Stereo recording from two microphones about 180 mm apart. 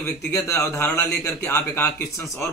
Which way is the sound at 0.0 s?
15° left (ahead or behind).